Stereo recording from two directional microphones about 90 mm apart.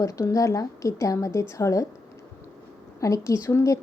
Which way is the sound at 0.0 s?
35° left (ahead or behind).